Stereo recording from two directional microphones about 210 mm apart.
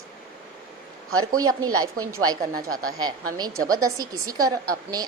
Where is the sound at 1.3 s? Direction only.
15° right (ahead or behind).